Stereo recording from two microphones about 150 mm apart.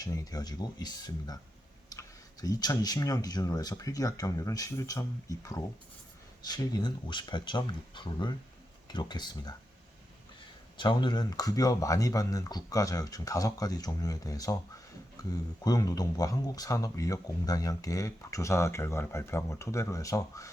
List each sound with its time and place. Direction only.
0.0 s speech: 25° left (ahead or behind)
10.8 s speech: 30° left (ahead or behind)